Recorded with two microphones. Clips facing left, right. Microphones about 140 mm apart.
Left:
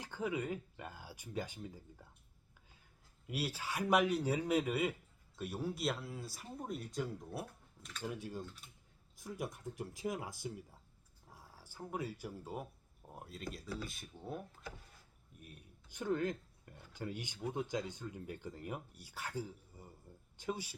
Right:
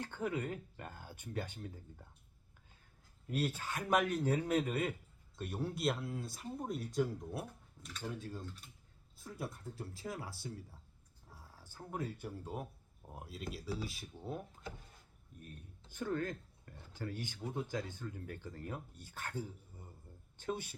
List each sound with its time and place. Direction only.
0.0 s speech: 10° left (ahead or behind)
3.2 s speech: 5° left (ahead or behind)
8.1 s speech: 15° left (ahead or behind)
11.3 s a sound: 10° left (ahead or behind)
12.2 s speech: centre (ahead or behind)
15.9 s speech: 15° left (ahead or behind)